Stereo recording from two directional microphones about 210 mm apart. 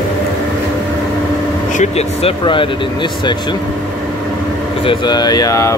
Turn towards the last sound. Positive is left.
turn(degrees=15)  # may be behind; listen again after turning